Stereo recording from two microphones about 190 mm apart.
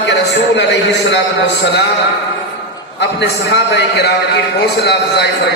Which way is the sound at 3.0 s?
65° left (ahead or behind).